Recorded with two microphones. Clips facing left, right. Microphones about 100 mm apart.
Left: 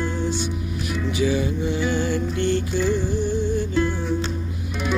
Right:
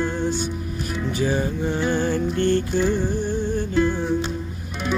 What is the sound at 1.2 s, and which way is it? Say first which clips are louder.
Music: left 1 dB; 40° right (ahead or behind).